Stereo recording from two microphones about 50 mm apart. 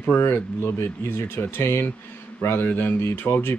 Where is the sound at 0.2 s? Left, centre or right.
Left.